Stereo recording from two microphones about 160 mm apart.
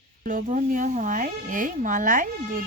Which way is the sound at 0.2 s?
55° right (ahead or behind).